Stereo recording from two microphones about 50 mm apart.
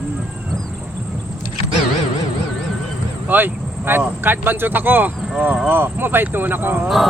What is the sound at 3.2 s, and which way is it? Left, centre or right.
Speech, right.